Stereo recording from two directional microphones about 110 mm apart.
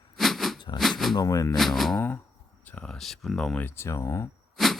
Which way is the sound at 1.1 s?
30° left (ahead or behind).